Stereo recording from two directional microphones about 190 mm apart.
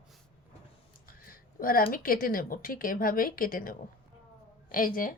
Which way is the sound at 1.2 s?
50° left (ahead or behind).